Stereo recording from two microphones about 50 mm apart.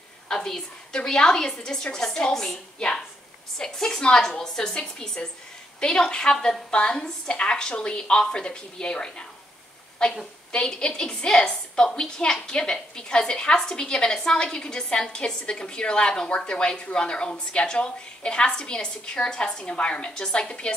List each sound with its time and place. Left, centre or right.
0.9 s a woman's voice: centre